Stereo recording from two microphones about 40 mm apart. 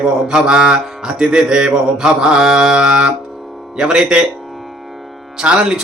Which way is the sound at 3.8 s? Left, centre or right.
Centre.